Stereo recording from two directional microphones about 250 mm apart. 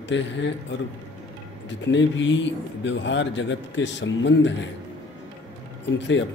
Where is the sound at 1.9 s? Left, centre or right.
Left.